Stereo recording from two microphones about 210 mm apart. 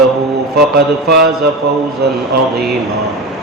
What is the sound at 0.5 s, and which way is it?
Speech, 50° right (ahead or behind).